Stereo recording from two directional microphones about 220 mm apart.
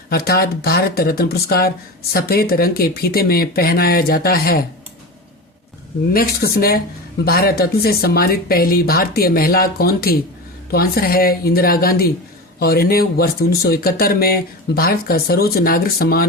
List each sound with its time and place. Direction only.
0.1 s speech: 45° left (ahead or behind)
6.1 s speech: 45° left (ahead or behind)